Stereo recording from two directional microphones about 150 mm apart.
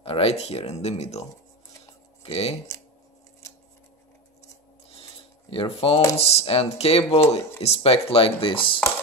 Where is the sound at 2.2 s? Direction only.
40° left (ahead or behind).